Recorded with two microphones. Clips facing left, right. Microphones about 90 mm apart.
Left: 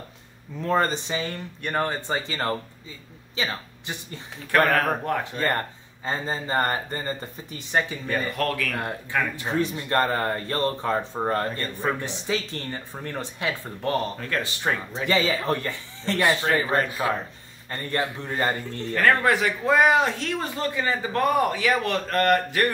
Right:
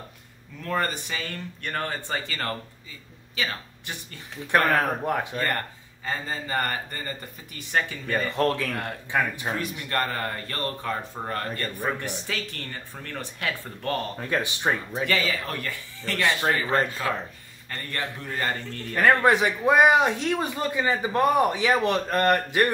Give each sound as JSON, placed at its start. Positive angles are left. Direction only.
{"t": 0.6, "sound": "speech", "side_deg": 25}
{"t": 4.7, "sound": "a man's voice", "side_deg": -15}
{"t": 6.0, "sound": "speech", "side_deg": 30}
{"t": 8.3, "sound": "a man's voice", "side_deg": -25}
{"t": 9.5, "sound": "speech", "side_deg": 25}
{"t": 14.3, "sound": "a man's voice", "side_deg": -20}
{"t": 15.0, "sound": "speech", "side_deg": 25}
{"t": 18.9, "sound": "a man's voice", "side_deg": -20}